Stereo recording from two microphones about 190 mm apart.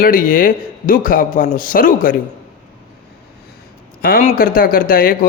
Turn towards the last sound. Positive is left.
turn(degrees=50)  # may be behind; listen again after turning